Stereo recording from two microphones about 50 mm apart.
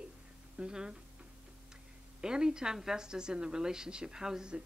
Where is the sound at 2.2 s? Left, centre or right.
Centre.